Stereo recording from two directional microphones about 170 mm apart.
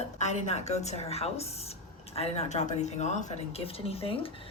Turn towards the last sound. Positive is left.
turn(degrees=35)  # may be behind; listen again after turning